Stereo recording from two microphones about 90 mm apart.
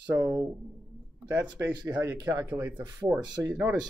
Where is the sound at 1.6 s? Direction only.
15° right (ahead or behind).